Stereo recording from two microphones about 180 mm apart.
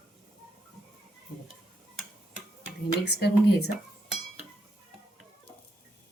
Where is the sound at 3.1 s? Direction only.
65° left (ahead or behind).